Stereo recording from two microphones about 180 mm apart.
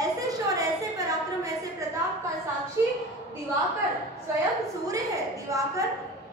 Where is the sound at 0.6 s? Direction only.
20° right (ahead or behind).